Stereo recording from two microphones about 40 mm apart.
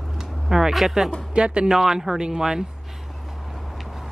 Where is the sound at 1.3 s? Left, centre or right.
Right.